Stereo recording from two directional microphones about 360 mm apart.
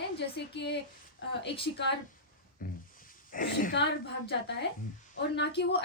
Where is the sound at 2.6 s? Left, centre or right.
Left.